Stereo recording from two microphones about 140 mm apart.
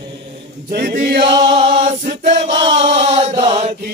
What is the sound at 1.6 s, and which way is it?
Choir, 55° right (ahead or behind).